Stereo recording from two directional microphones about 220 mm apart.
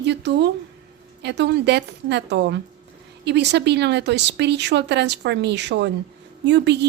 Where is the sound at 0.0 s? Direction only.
50° right (ahead or behind).